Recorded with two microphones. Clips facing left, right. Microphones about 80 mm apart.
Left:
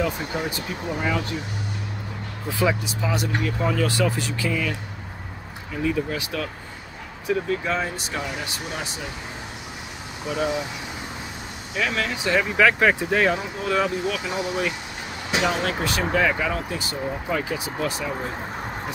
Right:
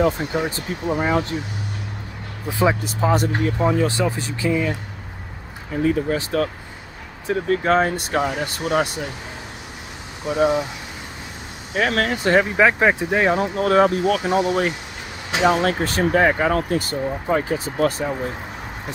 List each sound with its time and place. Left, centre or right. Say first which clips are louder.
0.3 s speech: right 4 dB; right
2.8 s speech: right 7 dB; right
5.7 s speech: right 5 dB; right
10.3 s speech: right 7 dB; right
11.7 s speech: right 5 dB; right
12.4 s speech: right 2 dB; right
13.4 s speech: right 8 dB; right